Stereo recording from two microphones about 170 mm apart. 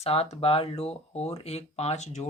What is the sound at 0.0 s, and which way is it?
Speech, 35° left (ahead or behind).